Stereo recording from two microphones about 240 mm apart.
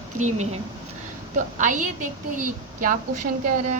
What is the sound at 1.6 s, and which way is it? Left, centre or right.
A woman's voice, right.